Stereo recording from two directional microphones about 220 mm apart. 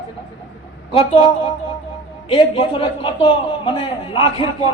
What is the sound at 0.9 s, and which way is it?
A man's voice, 25° left (ahead or behind).